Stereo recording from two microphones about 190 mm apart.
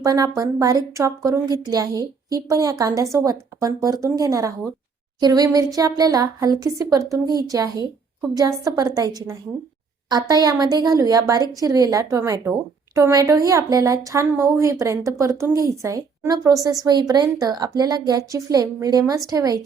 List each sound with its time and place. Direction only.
0.0 s speech: 20° right (ahead or behind)